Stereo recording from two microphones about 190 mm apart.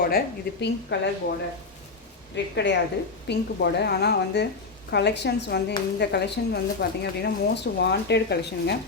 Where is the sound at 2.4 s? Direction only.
70° left (ahead or behind).